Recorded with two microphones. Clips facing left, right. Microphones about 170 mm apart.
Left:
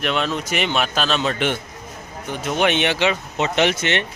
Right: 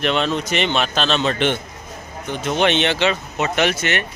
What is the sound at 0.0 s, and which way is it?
A man's voice, 5° left (ahead or behind).